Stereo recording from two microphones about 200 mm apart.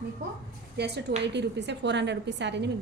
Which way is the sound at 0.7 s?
55° right (ahead or behind).